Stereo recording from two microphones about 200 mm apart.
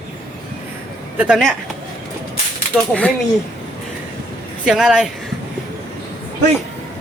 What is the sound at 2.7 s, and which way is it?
Speech, 5° right (ahead or behind).